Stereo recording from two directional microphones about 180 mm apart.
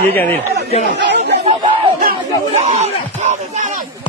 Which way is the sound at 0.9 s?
75° right (ahead or behind).